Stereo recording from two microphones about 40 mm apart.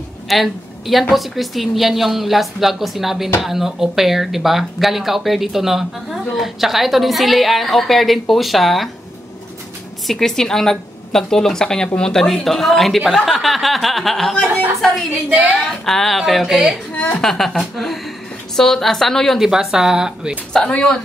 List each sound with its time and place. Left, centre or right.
0.3 s speech: centre
10.0 s a woman's voice: centre
15.0 s a woman's voice: right
15.5 s a woman's voice: centre
19.4 s speech: centre
20.6 s speech: left